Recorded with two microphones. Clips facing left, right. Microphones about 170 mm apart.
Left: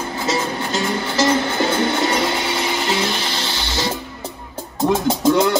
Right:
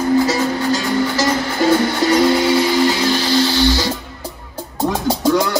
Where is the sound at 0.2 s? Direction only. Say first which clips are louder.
Right 5 dB; 25° left (ahead or behind).